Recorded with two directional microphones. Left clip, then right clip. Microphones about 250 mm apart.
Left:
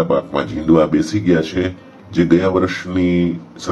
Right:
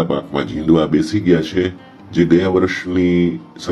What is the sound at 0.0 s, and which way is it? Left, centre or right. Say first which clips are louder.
Speech: left 3 dB; centre.